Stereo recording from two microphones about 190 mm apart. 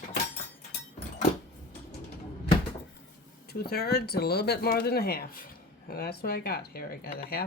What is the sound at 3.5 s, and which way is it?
Speech, 55° left (ahead or behind).